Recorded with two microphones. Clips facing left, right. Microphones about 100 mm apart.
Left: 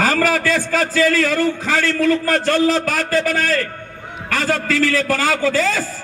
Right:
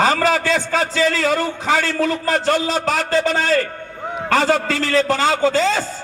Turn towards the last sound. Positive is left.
turn(degrees=-25)  # may be behind; listen again after turning